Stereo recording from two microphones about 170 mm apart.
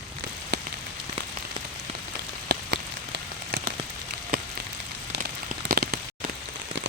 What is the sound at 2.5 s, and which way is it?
Rain on surface, 75° right (ahead or behind).